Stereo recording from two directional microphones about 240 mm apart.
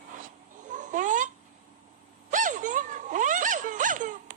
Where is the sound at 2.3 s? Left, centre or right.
Right.